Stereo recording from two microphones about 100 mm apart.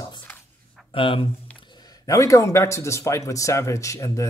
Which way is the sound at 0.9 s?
60° left (ahead or behind).